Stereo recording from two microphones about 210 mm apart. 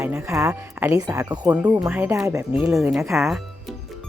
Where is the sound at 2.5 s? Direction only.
Centre (ahead or behind).